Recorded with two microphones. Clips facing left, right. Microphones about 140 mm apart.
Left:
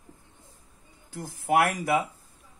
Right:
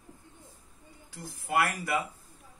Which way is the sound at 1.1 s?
55° left (ahead or behind).